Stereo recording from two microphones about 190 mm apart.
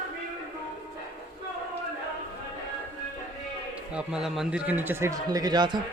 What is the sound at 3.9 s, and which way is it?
Speech, 5° right (ahead or behind).